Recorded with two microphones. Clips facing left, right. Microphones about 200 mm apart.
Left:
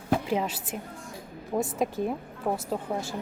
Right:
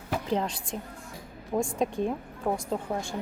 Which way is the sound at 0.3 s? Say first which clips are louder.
Even; 5° left (ahead or behind).